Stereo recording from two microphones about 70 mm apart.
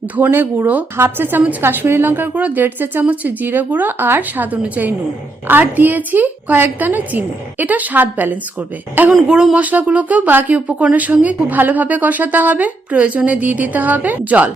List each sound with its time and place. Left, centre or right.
0.2 s speech: right
9.3 s speech: centre